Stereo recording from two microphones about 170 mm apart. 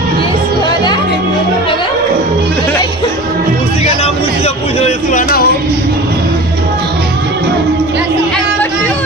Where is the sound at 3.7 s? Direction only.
40° left (ahead or behind); by 5.5 s 55° left (ahead or behind).